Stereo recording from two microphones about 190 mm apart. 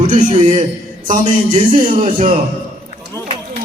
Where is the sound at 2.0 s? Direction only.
40° right (ahead or behind).